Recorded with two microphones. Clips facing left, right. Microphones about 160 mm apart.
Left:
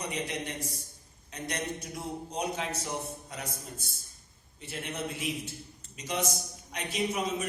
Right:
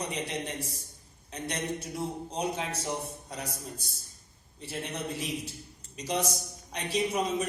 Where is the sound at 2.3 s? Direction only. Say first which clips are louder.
Left 1 dB; 30° right (ahead or behind).